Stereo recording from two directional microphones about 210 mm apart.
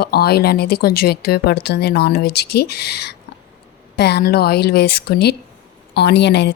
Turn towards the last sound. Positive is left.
turn(degrees=55)  # may be behind; listen again after turning